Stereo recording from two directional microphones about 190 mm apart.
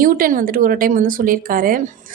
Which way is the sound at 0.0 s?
45° right (ahead or behind).